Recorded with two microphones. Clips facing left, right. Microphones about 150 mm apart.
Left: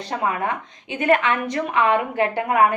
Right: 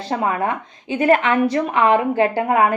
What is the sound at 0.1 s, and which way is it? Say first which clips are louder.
A woman's voice: right 3 dB; 30° right (ahead or behind).